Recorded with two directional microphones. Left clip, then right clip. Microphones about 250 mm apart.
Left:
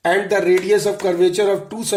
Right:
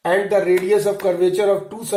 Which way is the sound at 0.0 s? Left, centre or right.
Left.